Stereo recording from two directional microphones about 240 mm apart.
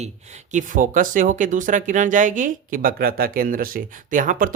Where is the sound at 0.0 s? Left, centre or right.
Right.